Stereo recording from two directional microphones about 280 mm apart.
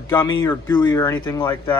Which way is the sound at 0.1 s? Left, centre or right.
Centre.